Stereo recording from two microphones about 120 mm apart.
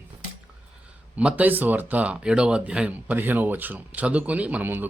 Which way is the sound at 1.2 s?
10° right (ahead or behind).